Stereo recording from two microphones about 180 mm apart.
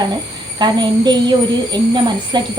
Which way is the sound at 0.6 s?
25° right (ahead or behind).